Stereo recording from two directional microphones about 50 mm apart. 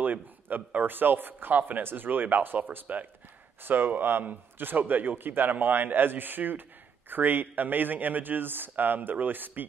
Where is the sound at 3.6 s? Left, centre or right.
Right.